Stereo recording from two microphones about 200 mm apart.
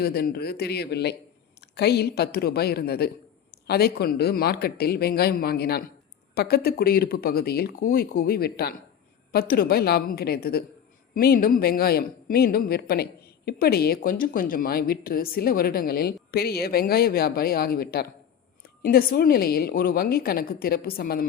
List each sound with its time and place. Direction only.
0.0 s speech: 50° left (ahead or behind)